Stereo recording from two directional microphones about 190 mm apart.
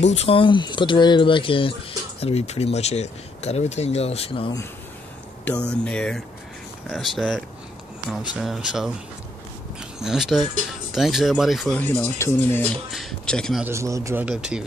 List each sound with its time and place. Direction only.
0.1 s speech: 30° left (ahead or behind)
5.4 s speech: 5° left (ahead or behind)
12.9 s speech: centre (ahead or behind)
13.7 s a man's voice: 15° right (ahead or behind)